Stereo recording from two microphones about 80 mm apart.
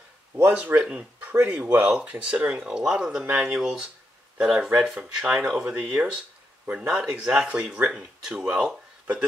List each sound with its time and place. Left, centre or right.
0.4 s speech: right
0.8 s a sound: centre
1.6 s speech: right